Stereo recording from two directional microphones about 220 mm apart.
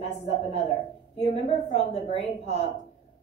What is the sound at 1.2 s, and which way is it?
A woman's voice, 30° left (ahead or behind).